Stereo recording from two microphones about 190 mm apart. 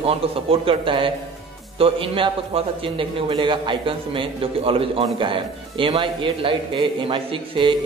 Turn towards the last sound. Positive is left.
turn(degrees=-25)  # may be behind; listen again after turning